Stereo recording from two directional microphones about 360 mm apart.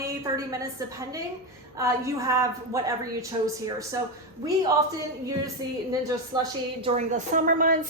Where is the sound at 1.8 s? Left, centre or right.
Centre.